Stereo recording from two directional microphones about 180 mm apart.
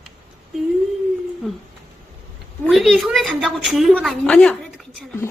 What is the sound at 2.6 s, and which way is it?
A woman's voice, centre (ahead or behind).